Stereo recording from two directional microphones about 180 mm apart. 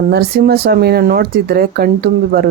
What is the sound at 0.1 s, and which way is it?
Speech, 60° right (ahead or behind).